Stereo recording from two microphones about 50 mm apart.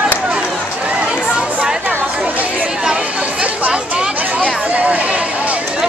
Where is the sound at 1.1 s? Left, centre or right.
Centre.